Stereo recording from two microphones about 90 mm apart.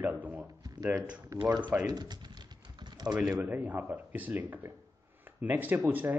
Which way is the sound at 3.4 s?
20° right (ahead or behind).